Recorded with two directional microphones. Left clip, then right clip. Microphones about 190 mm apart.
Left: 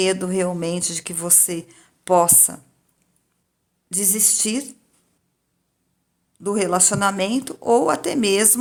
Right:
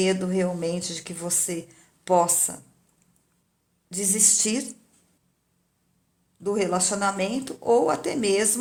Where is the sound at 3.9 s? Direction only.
25° left (ahead or behind).